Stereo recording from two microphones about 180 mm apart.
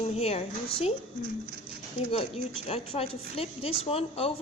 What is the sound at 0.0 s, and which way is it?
Speech, 35° left (ahead or behind).